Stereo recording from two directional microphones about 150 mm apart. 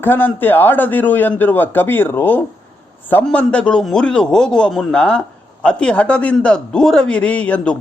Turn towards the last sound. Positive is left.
turn(degrees=10)  # may be behind; listen again after turning